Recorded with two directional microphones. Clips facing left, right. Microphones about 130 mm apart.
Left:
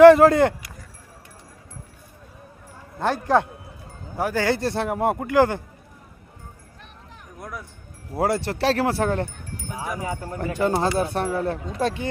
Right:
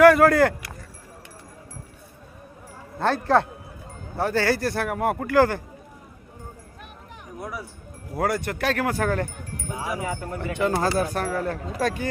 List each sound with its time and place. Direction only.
0.0 s speech: 25° left (ahead or behind)
3.0 s speech: 15° left (ahead or behind)
7.3 s speech: 5° right (ahead or behind)
8.1 s speech: 25° left (ahead or behind)
9.7 s speech: 5° right (ahead or behind)
10.0 s speech: 30° left (ahead or behind)